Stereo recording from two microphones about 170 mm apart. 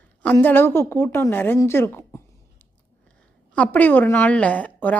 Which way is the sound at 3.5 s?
10° left (ahead or behind).